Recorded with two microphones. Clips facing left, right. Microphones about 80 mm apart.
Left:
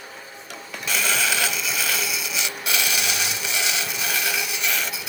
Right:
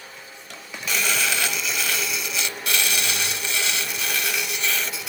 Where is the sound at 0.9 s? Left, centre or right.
Centre.